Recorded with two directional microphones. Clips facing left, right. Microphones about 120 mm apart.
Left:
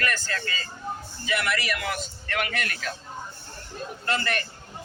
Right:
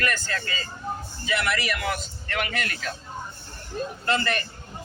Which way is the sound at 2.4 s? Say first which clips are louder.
Even; 25° right (ahead or behind).